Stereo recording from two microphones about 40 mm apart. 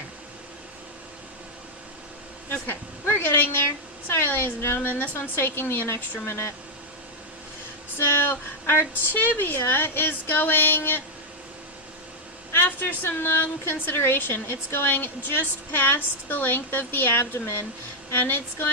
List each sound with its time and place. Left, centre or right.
2.5 s a woman's voice: left
4.1 s a woman's voice: left
5.2 s a woman's voice: left
7.9 s a sound: left
9.1 s a woman's voice: left
12.5 s a woman's voice: left
18.2 s speech: left